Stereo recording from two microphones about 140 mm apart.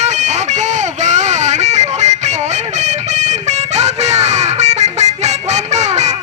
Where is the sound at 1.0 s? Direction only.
55° right (ahead or behind).